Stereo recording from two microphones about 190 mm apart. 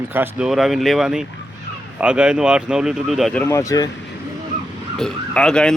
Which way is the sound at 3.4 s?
15° left (ahead or behind).